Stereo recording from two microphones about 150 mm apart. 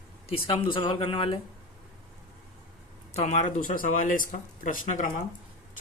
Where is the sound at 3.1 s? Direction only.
50° left (ahead or behind).